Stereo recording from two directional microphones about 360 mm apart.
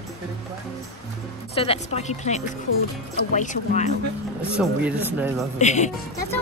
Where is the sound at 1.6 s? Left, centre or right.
Centre.